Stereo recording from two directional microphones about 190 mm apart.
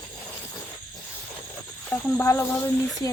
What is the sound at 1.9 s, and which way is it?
Speech, 10° left (ahead or behind).